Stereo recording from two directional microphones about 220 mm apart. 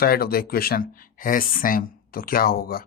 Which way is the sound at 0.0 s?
45° left (ahead or behind).